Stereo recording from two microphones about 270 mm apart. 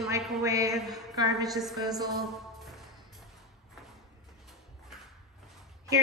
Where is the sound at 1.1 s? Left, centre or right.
Centre.